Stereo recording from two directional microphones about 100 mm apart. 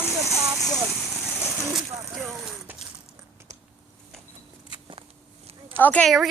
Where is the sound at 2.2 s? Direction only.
Centre (ahead or behind).